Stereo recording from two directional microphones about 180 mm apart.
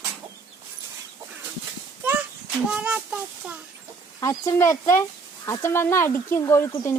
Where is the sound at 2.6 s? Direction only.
5° right (ahead or behind).